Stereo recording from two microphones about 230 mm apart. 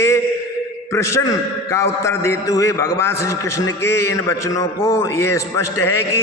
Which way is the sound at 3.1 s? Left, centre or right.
Left.